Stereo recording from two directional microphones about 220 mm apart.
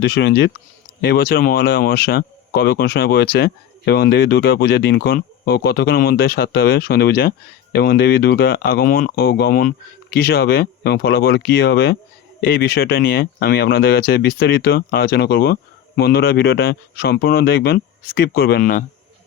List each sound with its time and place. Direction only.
0.0 s speech: 50° left (ahead or behind)